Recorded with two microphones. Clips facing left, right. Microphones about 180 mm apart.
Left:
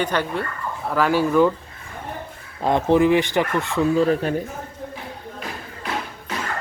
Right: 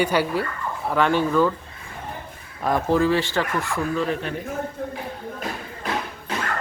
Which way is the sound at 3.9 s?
35° left (ahead or behind).